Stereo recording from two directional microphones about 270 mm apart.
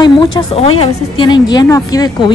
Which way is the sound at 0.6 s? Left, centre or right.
Left.